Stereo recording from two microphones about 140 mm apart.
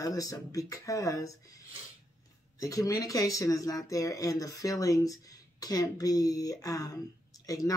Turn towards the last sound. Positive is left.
turn(degrees=25)  # may be behind; listen again after turning